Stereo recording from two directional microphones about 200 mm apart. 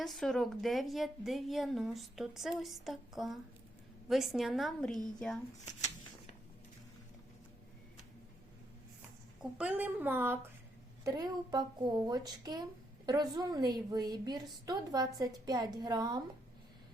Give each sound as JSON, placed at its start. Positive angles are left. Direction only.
{"t": 0.0, "sound": "a woman's voice", "side_deg": 0}
{"t": 9.4, "sound": "a woman's voice", "side_deg": -5}